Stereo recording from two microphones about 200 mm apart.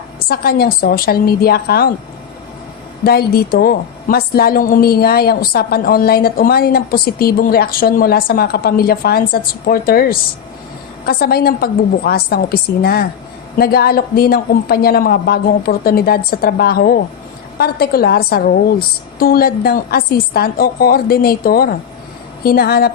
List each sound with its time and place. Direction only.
0.3 s a woman's voice: 50° left (ahead or behind)
3.0 s a woman's voice: 50° left (ahead or behind)